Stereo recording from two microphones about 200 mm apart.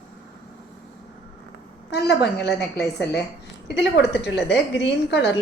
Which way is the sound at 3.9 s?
60° left (ahead or behind).